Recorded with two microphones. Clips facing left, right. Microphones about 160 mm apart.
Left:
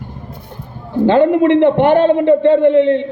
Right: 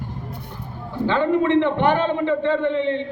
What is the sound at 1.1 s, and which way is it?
A woman's voice, 60° left (ahead or behind).